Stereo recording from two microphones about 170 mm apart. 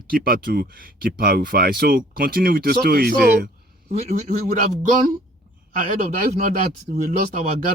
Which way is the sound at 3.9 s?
45° right (ahead or behind).